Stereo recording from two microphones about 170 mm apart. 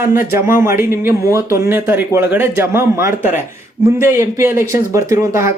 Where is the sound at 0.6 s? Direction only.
15° right (ahead or behind).